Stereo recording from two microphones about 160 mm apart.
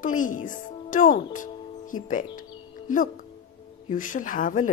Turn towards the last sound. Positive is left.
turn(degrees=55)  # may be behind; listen again after turning